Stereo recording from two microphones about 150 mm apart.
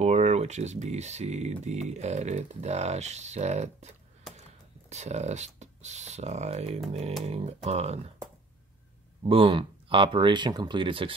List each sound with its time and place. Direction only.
0.0 s speech: 50° right (ahead or behind)
9.2 s speech: 35° right (ahead or behind)